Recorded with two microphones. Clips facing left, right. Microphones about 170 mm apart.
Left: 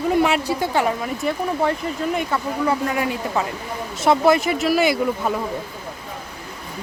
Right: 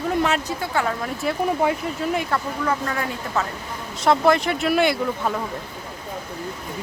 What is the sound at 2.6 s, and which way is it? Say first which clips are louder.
Speech: left 3 dB; 15° left (ahead or behind).